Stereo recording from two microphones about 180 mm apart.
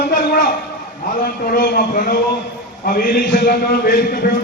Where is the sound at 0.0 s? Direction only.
55° left (ahead or behind).